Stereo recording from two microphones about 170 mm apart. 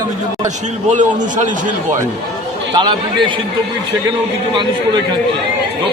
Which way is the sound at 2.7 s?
25° right (ahead or behind).